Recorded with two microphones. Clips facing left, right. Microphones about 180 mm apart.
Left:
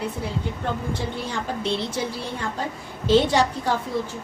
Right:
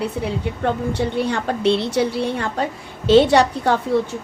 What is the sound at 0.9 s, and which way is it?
A woman's voice, 65° right (ahead or behind).